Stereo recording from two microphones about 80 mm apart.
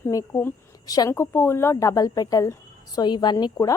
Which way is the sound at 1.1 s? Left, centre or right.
Left.